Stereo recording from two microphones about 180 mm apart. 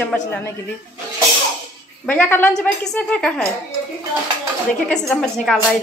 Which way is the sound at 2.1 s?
10° left (ahead or behind).